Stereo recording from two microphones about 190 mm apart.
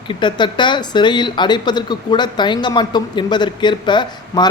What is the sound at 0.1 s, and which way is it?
Speech, 25° left (ahead or behind).